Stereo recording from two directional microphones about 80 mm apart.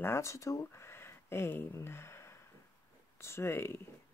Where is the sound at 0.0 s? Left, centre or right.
Left.